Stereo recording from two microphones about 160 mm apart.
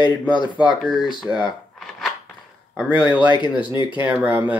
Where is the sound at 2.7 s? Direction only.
10° right (ahead or behind).